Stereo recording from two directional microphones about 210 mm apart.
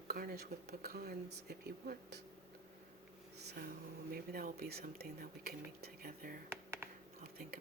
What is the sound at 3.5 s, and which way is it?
Speech, 45° right (ahead or behind).